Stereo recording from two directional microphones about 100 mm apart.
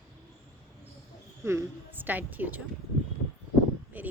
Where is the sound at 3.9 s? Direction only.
15° right (ahead or behind).